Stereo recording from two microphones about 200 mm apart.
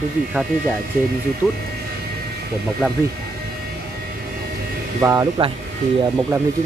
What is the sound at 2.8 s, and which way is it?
Speech, 5° right (ahead or behind).